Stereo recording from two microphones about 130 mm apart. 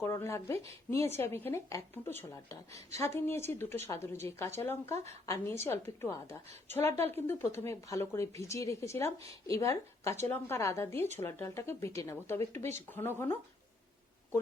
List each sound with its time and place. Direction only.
0.0 s speech: 20° left (ahead or behind)